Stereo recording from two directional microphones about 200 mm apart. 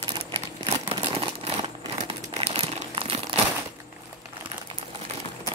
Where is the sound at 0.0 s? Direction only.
25° right (ahead or behind).